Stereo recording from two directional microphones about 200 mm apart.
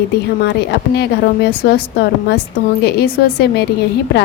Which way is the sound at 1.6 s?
45° left (ahead or behind).